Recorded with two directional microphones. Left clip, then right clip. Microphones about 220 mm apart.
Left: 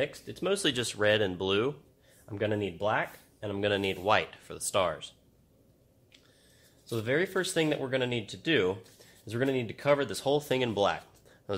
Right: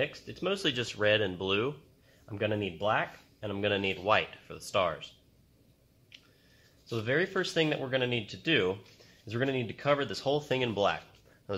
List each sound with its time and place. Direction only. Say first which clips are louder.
0.0 s speech: left 1 dB; 40° left (ahead or behind)
6.9 s speech: left 1 dB; 35° left (ahead or behind)